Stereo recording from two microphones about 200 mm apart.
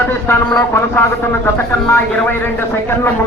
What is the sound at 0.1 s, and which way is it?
Speech, 10° left (ahead or behind).